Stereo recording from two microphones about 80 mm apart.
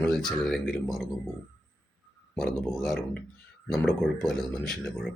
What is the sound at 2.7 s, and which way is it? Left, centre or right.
Speech, centre.